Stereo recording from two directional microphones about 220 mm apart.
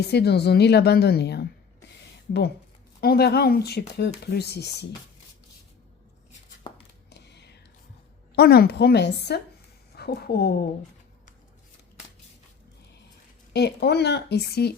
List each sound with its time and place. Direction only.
0.0 s speech: 50° left (ahead or behind)
3.0 s speech: 45° left (ahead or behind)
7.1 s whispering: 50° left (ahead or behind)
8.4 s speech: 45° left (ahead or behind)
13.5 s speech: 50° left (ahead or behind)